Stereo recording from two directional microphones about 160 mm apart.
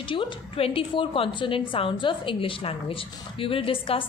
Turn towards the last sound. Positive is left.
turn(degrees=35)  # may be behind; listen again after turning